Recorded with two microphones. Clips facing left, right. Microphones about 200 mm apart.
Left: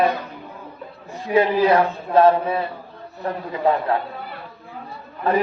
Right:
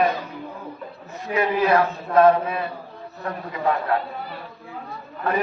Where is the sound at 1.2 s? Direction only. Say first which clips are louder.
Left 4 dB; 30° left (ahead or behind).